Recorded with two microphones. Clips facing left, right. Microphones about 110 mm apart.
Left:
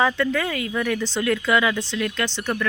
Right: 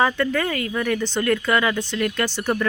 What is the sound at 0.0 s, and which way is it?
Speech, 5° right (ahead or behind).